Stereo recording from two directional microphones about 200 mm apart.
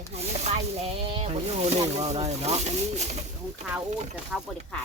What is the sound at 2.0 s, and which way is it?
Speech, 30° right (ahead or behind).